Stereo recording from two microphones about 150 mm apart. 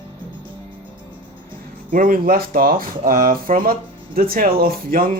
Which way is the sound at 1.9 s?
70° right (ahead or behind).